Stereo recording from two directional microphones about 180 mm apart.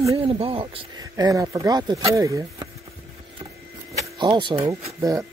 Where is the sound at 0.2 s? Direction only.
35° right (ahead or behind).